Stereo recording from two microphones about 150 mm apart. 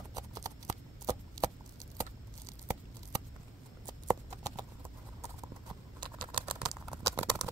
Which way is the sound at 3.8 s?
25° right (ahead or behind).